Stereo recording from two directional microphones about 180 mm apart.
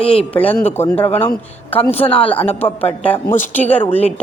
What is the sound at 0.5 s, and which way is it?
A man's voice, 10° left (ahead or behind).